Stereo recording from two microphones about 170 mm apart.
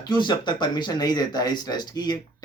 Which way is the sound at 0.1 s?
25° left (ahead or behind).